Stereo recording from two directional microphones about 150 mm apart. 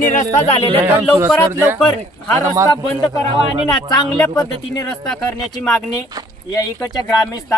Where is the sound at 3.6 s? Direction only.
5° left (ahead or behind).